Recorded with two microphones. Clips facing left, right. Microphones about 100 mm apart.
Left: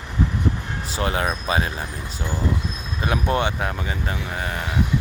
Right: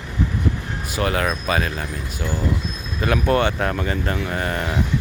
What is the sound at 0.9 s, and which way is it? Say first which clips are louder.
Speech: right 2 dB; 25° left (ahead or behind).